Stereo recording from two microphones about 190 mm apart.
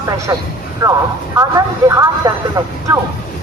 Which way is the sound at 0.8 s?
20° right (ahead or behind).